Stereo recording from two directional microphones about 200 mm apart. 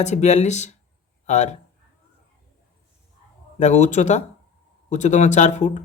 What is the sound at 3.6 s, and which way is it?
Speech, 35° left (ahead or behind).